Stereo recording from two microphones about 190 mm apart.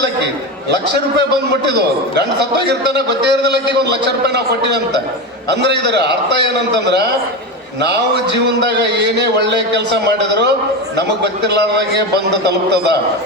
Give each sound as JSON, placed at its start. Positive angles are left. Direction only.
{"t": 2.6, "sound": "a man's voice", "side_deg": -60}
{"t": 5.5, "sound": "a man's voice", "side_deg": -65}
{"t": 7.8, "sound": "a man's voice", "side_deg": -60}